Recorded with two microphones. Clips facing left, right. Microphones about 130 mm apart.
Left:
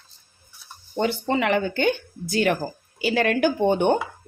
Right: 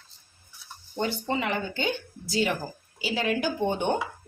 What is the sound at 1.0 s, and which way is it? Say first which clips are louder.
Speech: left 5 dB; 75° left (ahead or behind).